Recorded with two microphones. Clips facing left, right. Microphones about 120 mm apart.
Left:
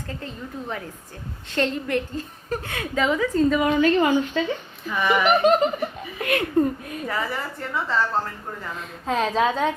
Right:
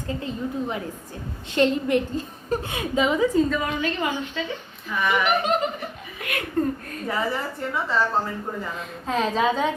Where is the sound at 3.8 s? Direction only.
45° left (ahead or behind).